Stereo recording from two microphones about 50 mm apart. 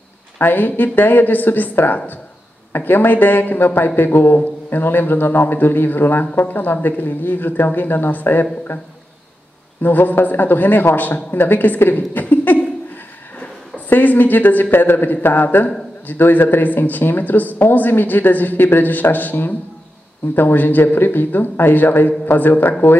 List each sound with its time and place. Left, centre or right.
0.4 s a man's voice: left
9.8 s a man's voice: left
13.8 s a man's voice: left